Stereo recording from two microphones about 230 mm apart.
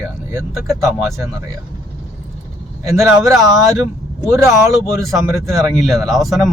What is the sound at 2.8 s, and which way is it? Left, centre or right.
A man's voice, centre.